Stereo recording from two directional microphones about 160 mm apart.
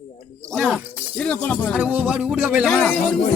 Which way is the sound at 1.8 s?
10° right (ahead or behind).